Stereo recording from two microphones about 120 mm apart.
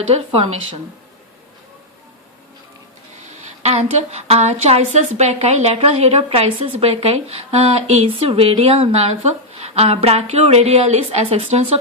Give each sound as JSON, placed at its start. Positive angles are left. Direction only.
{"t": 0.1, "sound": "speech", "side_deg": -55}
{"t": 3.4, "sound": "speech", "side_deg": -65}